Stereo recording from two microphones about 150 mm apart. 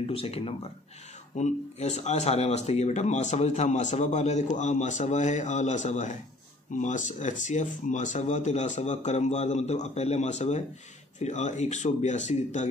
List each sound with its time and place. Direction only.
0.0 s speech: 40° left (ahead or behind)
1.3 s speech: 50° left (ahead or behind)